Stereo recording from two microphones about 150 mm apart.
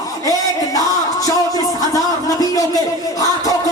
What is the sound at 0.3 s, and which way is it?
Music, 25° left (ahead or behind).